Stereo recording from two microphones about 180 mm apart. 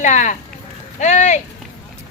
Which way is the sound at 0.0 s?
40° left (ahead or behind).